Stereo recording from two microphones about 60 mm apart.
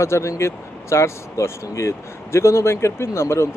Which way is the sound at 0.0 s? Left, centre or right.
Left.